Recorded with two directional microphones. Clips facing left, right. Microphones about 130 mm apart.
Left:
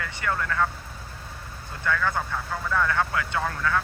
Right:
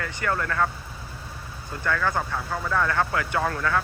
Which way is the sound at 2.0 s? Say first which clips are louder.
Right 1 dB; 15° right (ahead or behind).